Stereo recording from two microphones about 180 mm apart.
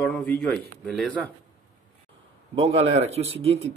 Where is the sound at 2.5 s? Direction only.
30° right (ahead or behind).